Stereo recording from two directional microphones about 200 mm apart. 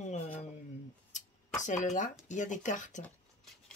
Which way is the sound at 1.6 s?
35° left (ahead or behind).